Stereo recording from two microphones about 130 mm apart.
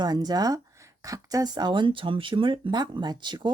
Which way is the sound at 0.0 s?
30° right (ahead or behind).